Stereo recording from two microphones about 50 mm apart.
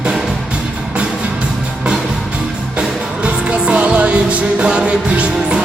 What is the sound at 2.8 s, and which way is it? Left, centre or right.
Music, right.